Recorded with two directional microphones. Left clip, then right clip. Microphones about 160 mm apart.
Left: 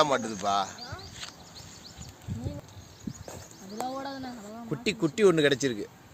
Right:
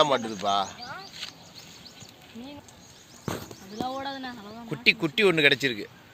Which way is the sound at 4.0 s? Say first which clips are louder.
Right 3 dB; 40° left (ahead or behind).